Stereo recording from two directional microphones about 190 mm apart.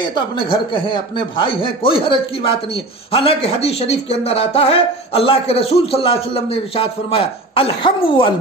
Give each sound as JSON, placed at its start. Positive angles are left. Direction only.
{"t": 0.1, "sound": "speech", "side_deg": 25}